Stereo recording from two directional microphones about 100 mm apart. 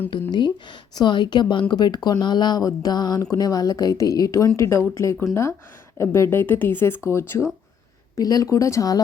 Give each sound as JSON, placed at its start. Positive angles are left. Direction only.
{"t": 0.1, "sound": "a woman's voice", "side_deg": 50}
{"t": 8.1, "sound": "a woman's voice", "side_deg": 40}